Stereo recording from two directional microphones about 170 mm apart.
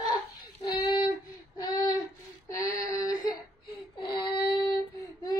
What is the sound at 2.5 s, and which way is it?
Female singing, 20° left (ahead or behind).